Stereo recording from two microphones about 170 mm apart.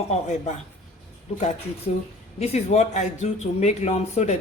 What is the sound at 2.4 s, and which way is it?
Speech, 40° left (ahead or behind).